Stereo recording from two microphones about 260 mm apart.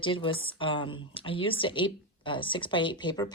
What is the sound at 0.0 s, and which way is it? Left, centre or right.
A woman's voice, centre.